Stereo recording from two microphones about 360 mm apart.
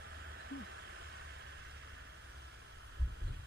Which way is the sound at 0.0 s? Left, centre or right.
Right.